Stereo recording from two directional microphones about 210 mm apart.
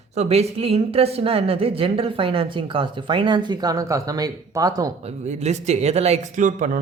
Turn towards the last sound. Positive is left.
turn(degrees=-40)  # may be behind; listen again after turning